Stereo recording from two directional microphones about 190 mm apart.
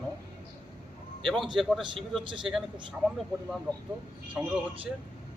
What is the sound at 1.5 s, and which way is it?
Speech, centre (ahead or behind).